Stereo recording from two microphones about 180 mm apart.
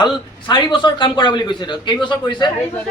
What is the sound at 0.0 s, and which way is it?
A man's voice, 25° left (ahead or behind).